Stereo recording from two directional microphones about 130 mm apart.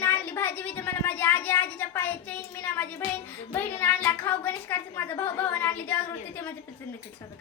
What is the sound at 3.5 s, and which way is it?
A woman's voice, 15° left (ahead or behind).